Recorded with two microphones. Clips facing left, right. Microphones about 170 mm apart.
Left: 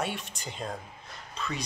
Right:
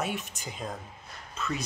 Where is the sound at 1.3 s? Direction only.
5° right (ahead or behind).